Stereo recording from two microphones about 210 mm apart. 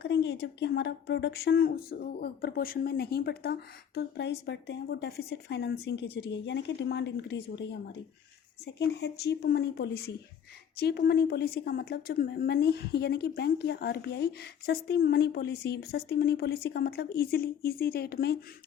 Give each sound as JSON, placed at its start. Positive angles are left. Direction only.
{"t": 0.0, "sound": "speech", "side_deg": 55}